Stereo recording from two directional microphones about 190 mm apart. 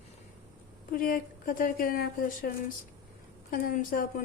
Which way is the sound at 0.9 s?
50° left (ahead or behind).